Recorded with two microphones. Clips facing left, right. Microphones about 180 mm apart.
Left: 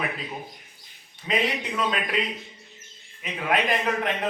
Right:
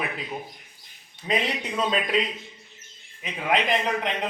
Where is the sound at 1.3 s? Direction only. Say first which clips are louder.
Even; 30° right (ahead or behind).